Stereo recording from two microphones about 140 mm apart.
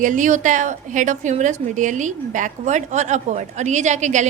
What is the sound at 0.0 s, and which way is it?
A woman's voice, 65° right (ahead or behind).